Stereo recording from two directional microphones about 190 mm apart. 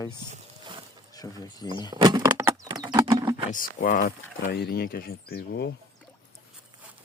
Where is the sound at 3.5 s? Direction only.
45° left (ahead or behind).